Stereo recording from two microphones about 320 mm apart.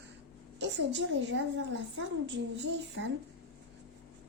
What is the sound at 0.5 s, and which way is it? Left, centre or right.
A woman's voice, right.